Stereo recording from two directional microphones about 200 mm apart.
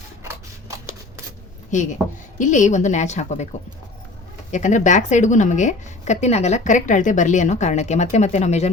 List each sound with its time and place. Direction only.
1.7 s a woman's voice: 35° left (ahead or behind)
4.5 s a woman's voice: 40° left (ahead or behind)